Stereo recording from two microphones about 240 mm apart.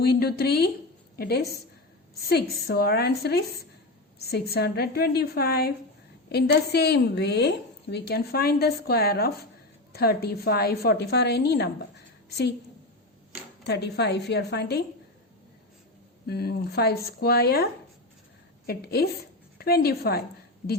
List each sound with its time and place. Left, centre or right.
0.0 s a woman's voice: left
13.7 s a woman's voice: left
16.2 s a woman's voice: left